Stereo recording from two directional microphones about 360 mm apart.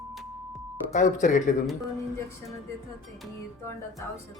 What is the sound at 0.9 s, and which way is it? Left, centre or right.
Speech, left.